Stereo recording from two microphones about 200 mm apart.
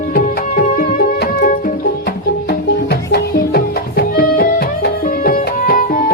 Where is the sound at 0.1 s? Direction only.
45° left (ahead or behind).